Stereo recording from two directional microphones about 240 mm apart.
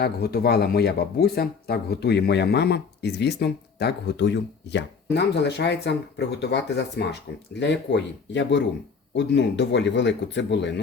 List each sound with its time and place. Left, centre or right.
0.0 s speech: left